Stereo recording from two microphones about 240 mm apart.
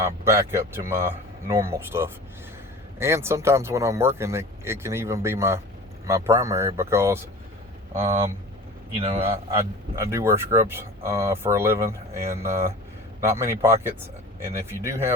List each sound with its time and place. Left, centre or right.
0.0 s speech: centre
7.9 s a man's voice: right
10.0 s speech: centre